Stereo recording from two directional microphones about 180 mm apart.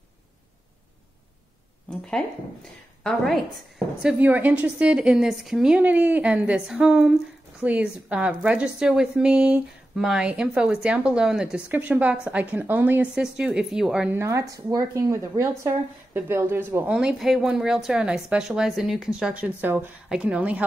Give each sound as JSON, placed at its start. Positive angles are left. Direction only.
{"t": 3.0, "sound": "a woman's voice", "side_deg": 0}